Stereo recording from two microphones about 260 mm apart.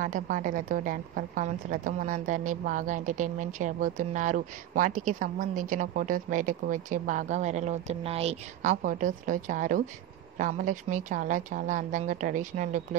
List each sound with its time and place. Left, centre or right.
0.0 s a woman's voice: right